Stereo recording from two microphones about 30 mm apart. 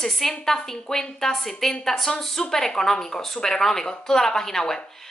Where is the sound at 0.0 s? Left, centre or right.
Centre.